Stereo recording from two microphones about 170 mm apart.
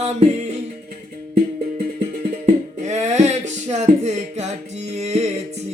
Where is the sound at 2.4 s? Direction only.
40° right (ahead or behind).